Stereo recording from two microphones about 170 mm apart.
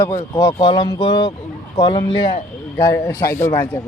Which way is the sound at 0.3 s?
20° left (ahead or behind).